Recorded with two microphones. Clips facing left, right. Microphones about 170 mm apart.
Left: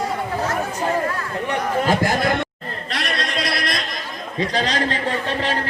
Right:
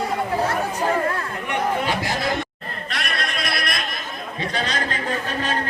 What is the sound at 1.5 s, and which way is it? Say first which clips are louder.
Chatter: left 3 dB; 40° left (ahead or behind).